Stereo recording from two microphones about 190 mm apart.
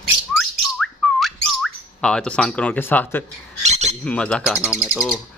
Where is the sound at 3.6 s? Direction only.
35° right (ahead or behind).